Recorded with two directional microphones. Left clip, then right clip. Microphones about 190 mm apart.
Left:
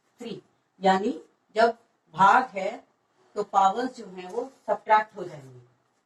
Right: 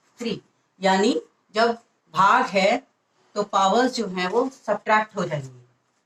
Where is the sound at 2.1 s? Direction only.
15° right (ahead or behind).